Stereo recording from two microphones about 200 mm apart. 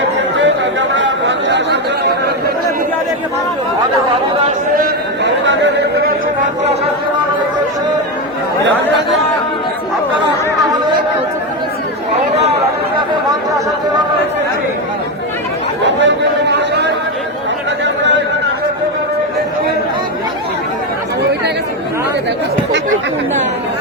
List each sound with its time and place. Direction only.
0.3 s chatter: 65° right (ahead or behind)
5.2 s chatter: 60° right (ahead or behind)
15.8 s chatter: 60° right (ahead or behind)
17.8 s a sound: 65° right (ahead or behind)